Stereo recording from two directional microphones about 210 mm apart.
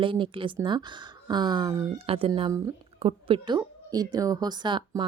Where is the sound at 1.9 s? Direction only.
25° right (ahead or behind).